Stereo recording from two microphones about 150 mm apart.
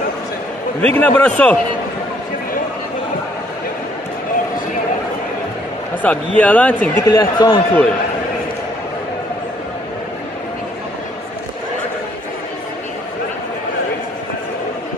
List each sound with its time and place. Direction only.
0.7 s a man's voice: 10° left (ahead or behind)
6.0 s a man's voice: 10° left (ahead or behind)
7.1 s speech: 25° left (ahead or behind)